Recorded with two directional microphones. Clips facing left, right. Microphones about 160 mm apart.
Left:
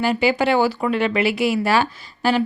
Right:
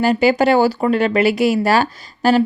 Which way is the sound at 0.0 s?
40° right (ahead or behind).